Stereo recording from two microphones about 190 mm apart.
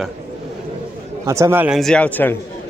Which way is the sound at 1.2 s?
15° right (ahead or behind).